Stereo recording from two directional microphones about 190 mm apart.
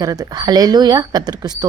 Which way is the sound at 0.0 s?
20° right (ahead or behind).